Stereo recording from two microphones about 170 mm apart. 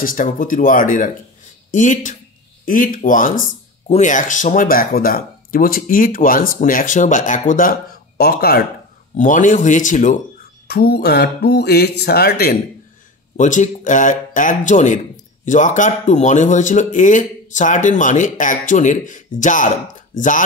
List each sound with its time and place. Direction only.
0.0 s speech: 55° left (ahead or behind)
9.1 s speech: 50° left (ahead or behind)
10.7 s speech: 65° left (ahead or behind)
13.4 s speech: 45° left (ahead or behind)